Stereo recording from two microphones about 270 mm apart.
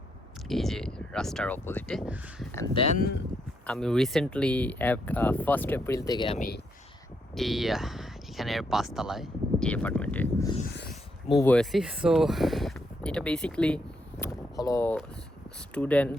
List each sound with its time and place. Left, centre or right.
0.4 s speech: centre
2.6 s speech: left
3.7 s speech: centre
7.3 s speech: centre
10.7 s a sound: left
11.3 s speech: centre